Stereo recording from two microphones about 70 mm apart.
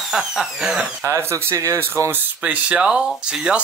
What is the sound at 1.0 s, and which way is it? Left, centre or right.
Speech, right.